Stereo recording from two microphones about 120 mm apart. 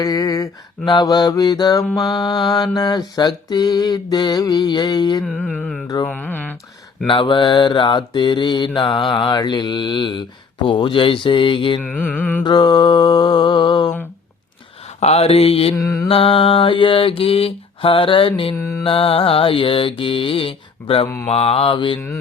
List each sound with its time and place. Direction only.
0.0 s mantra: 30° left (ahead or behind)
1.9 s music: centre (ahead or behind)
2.3 s mantra: 35° left (ahead or behind)
5.2 s music: 5° left (ahead or behind)
6.1 s carnatic music: 10° left (ahead or behind)
7.1 s mantra: 45° left (ahead or behind)
11.8 s carnatic music: 15° left (ahead or behind)
12.4 s mantra: 35° left (ahead or behind)
14.8 s a sound: 60° left (ahead or behind)
15.7 s mantra: 25° left (ahead or behind)
16.0 s mantra: 50° left (ahead or behind)
18.5 s mantra: 20° left (ahead or behind)
18.8 s mantra: 50° left (ahead or behind)